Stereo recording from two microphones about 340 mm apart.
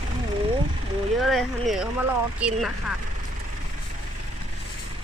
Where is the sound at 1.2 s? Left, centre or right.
Centre.